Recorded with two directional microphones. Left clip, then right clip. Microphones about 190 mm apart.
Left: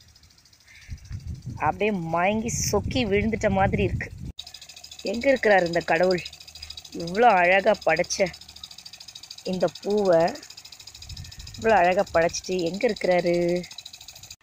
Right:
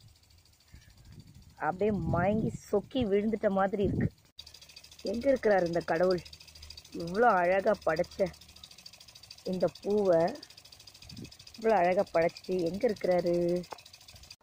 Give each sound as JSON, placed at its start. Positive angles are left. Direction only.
{"t": 1.6, "sound": "speech", "side_deg": 20}
{"t": 5.2, "sound": "speech", "side_deg": 25}
{"t": 6.2, "sound": "a sound", "side_deg": 0}
{"t": 7.2, "sound": "speech", "side_deg": 20}
{"t": 9.3, "sound": "a sound", "side_deg": 0}
{"t": 9.7, "sound": "speech", "side_deg": 0}
{"t": 10.0, "sound": "speech", "side_deg": 20}
{"t": 11.6, "sound": "speech", "side_deg": 20}
{"t": 13.5, "sound": "speech", "side_deg": 0}